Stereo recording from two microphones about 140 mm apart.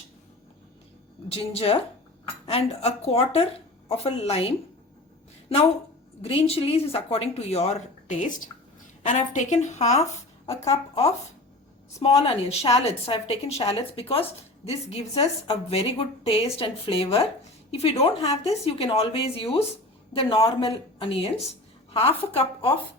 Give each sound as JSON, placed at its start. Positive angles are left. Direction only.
{"t": 1.3, "sound": "a woman's voice", "side_deg": 45}
{"t": 6.2, "sound": "a woman's voice", "side_deg": 45}